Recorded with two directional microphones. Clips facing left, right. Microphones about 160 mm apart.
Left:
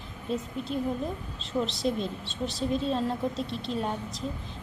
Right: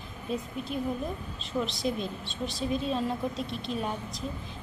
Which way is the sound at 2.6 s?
5° right (ahead or behind).